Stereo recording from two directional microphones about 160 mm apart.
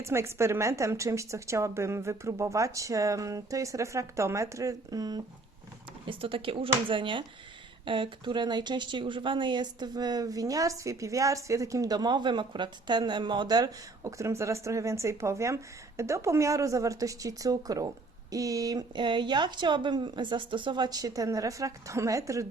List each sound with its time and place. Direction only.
0.0 s a woman's voice: 15° right (ahead or behind)
6.1 s a woman's voice: 35° right (ahead or behind)